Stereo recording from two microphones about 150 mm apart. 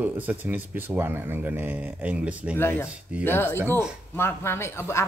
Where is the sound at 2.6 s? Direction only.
15° left (ahead or behind).